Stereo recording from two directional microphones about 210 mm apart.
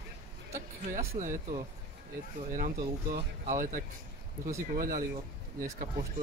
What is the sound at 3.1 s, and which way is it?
Speech, 40° right (ahead or behind).